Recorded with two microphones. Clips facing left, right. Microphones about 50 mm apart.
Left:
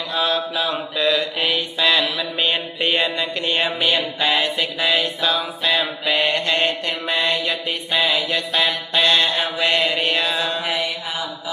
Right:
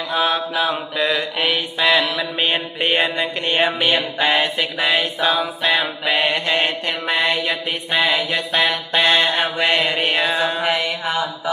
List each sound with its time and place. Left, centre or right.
0.1 s mantra: right
2.3 s a sound: centre
2.8 s mantra: right
3.9 s a sound: centre
5.7 s mantra: centre
10.6 s mantra: right